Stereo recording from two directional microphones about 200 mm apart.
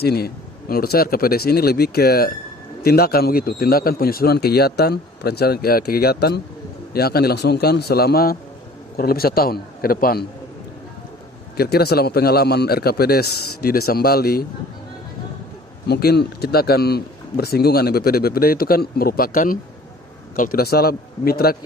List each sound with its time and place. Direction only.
0.0 s speech: 50° left (ahead or behind)
11.5 s speech: 50° left (ahead or behind)
15.9 s speech: 55° left (ahead or behind)